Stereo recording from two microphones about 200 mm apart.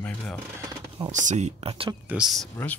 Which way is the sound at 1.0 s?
40° right (ahead or behind).